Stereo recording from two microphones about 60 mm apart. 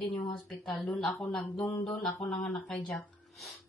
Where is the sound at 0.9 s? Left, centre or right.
Centre.